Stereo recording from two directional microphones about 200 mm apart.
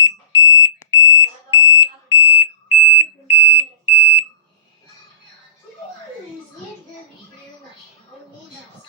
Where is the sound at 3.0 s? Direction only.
10° right (ahead or behind).